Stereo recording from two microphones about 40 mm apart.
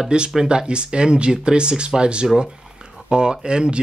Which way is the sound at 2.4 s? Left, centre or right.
Right.